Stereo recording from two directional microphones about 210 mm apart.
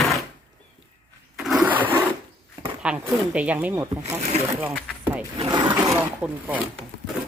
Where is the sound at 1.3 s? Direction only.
Centre (ahead or behind).